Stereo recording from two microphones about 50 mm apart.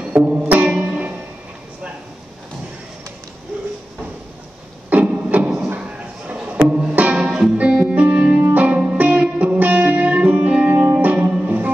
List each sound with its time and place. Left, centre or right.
0.2 s music: centre
0.5 s music: right
4.8 s music: right
5.8 s a sound: right
6.9 s music: right
10.9 s music: right